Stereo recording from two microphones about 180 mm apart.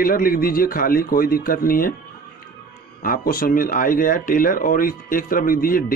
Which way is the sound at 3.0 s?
55° left (ahead or behind).